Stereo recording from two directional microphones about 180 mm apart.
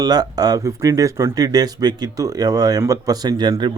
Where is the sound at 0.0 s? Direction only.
20° right (ahead or behind).